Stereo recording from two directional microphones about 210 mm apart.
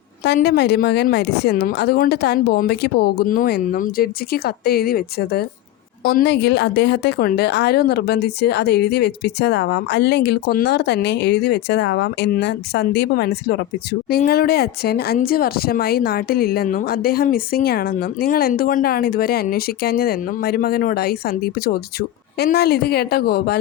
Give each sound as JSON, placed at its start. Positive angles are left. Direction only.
{"t": 0.3, "sound": "speech", "side_deg": 50}